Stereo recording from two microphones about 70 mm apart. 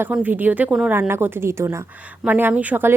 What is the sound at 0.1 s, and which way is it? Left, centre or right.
A woman's voice, right.